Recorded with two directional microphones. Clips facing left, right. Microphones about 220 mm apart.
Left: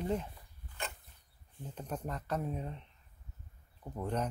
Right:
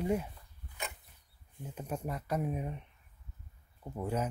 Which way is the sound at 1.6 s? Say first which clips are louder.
Right 2 dB; 10° right (ahead or behind).